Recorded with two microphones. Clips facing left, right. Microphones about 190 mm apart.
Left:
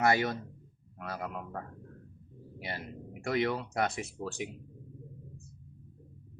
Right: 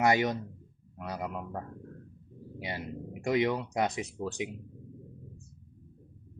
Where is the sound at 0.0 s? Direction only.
15° right (ahead or behind).